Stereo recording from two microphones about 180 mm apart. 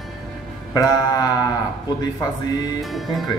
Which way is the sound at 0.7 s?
20° left (ahead or behind).